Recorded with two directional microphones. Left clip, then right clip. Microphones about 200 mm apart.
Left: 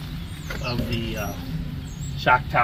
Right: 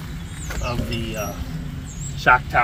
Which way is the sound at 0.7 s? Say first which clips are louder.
Right 1 dB; 10° left (ahead or behind).